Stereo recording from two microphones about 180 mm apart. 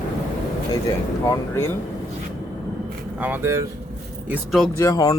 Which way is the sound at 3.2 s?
10° right (ahead or behind).